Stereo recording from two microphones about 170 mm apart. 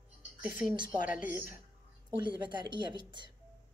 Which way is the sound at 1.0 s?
50° left (ahead or behind).